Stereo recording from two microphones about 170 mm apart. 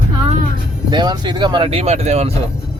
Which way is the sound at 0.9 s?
25° right (ahead or behind).